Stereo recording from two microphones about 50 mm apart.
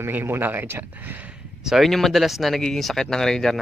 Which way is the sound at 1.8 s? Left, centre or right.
Centre.